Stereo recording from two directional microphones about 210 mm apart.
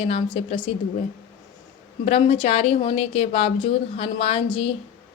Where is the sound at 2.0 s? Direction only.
30° left (ahead or behind).